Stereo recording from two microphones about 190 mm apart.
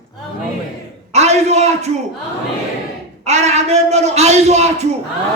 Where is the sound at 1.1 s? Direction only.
35° right (ahead or behind).